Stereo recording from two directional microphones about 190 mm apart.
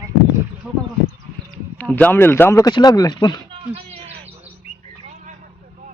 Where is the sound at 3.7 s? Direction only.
30° right (ahead or behind).